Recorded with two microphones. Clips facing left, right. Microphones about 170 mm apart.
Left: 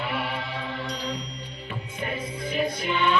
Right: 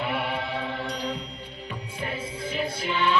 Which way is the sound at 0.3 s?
55° right (ahead or behind).